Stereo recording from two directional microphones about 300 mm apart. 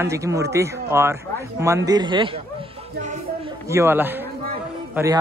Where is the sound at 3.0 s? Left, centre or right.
Right.